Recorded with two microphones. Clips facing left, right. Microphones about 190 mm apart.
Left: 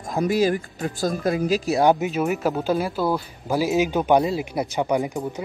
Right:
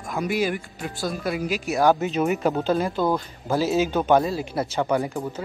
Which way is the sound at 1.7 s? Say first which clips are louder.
Even; 20° left (ahead or behind).